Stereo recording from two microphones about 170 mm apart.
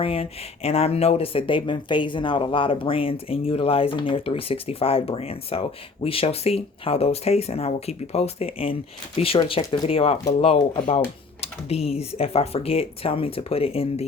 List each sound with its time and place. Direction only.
0.0 s speech: 35° left (ahead or behind)